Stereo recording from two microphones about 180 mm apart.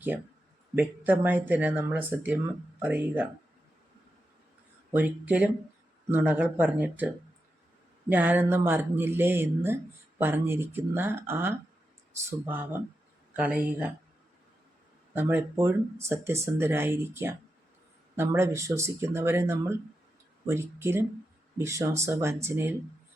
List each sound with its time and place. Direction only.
0.8 s speech: 10° right (ahead or behind)
4.9 s speech: 10° right (ahead or behind)
8.1 s speech: 10° right (ahead or behind)
15.1 s speech: 10° right (ahead or behind)